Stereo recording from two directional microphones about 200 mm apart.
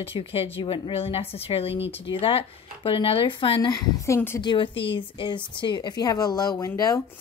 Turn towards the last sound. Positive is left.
turn(degrees=15)  # may be behind; listen again after turning